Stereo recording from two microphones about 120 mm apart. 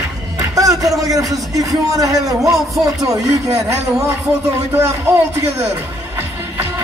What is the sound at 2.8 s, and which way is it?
Speech, 30° right (ahead or behind).